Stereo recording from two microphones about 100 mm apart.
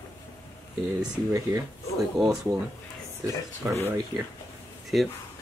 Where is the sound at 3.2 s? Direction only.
30° right (ahead or behind).